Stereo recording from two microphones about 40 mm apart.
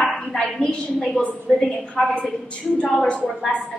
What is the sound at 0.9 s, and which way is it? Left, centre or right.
A woman's voice, centre.